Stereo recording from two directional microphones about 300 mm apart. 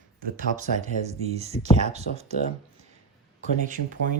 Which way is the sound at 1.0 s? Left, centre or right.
Right.